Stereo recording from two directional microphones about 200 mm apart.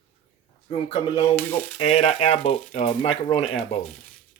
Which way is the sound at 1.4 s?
10° left (ahead or behind).